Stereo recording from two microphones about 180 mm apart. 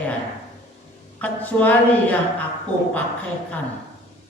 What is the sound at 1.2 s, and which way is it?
Speech, 10° left (ahead or behind).